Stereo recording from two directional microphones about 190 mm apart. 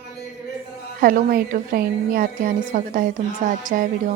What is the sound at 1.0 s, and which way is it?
A woman's voice, 50° right (ahead or behind).